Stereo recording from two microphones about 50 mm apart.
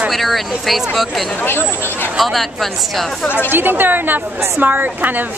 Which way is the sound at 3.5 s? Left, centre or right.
Right.